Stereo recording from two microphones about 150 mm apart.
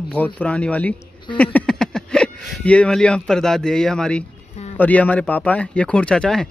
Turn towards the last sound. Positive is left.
turn(degrees=5)  # may be behind; listen again after turning